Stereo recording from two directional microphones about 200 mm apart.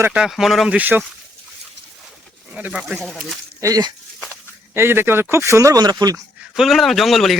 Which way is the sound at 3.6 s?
20° right (ahead or behind).